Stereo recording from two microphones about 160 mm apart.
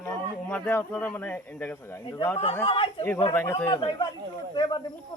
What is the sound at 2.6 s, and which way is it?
Speech, 35° left (ahead or behind).